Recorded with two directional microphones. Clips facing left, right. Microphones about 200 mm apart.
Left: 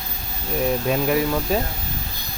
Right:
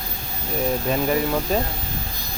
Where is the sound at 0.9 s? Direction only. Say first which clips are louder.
Even; 5° left (ahead or behind).